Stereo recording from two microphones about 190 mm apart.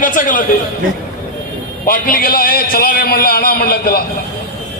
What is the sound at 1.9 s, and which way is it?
A man's voice, 50° left (ahead or behind).